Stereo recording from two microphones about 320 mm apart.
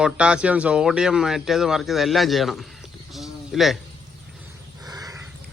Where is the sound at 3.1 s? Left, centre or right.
Centre.